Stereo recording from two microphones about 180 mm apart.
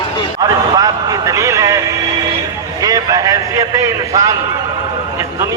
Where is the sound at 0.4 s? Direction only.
20° right (ahead or behind).